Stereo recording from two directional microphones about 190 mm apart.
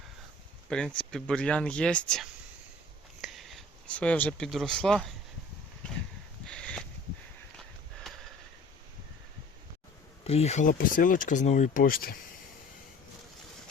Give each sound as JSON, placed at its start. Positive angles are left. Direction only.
{"t": 0.7, "sound": "speech", "side_deg": 5}
{"t": 6.4, "sound": "a sound", "side_deg": 5}
{"t": 10.2, "sound": "speech", "side_deg": 35}